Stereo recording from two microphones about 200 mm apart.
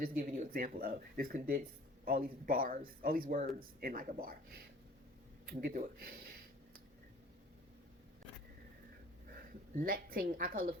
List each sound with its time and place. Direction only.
0.0 s speech: 45° right (ahead or behind)
9.7 s speech: 45° right (ahead or behind)